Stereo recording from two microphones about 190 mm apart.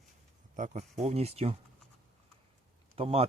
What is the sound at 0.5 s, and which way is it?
Speech, 40° right (ahead or behind).